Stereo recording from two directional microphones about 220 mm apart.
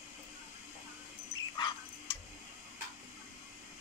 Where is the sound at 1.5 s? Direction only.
20° left (ahead or behind).